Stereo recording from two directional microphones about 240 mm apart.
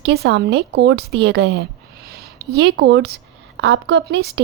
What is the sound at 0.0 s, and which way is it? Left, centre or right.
Speech, right.